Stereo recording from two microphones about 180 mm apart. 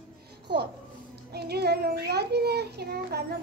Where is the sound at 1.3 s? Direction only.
60° right (ahead or behind).